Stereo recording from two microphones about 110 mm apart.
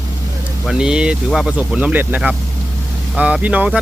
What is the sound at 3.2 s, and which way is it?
Speech, 10° right (ahead or behind).